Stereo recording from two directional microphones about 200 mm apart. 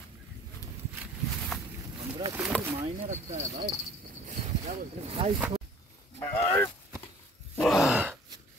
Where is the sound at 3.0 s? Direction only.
40° right (ahead or behind).